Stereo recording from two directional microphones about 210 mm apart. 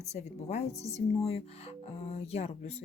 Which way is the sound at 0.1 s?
30° left (ahead or behind).